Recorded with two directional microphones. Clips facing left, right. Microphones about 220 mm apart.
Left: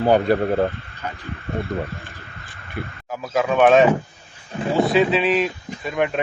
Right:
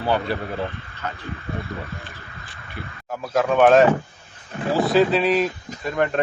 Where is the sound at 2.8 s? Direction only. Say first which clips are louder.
Left 6 dB; 55° left (ahead or behind).